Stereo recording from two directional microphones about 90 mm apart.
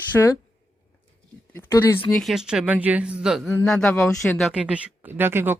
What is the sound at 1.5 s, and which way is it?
Speech, 25° left (ahead or behind).